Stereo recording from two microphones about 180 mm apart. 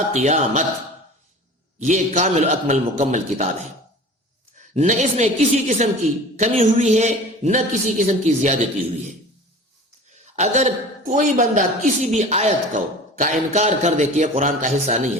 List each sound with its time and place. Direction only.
0.1 s a woman's voice: 40° right (ahead or behind)
1.8 s a woman's voice: 40° right (ahead or behind)
4.5 s a woman's voice: 40° right (ahead or behind)
10.3 s a woman's voice: 40° right (ahead or behind)